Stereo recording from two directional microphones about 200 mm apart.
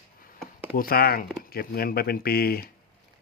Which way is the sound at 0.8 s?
50° left (ahead or behind).